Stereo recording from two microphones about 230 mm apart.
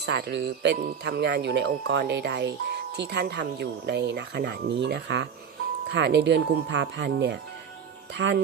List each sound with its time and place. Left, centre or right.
0.0 s speech: right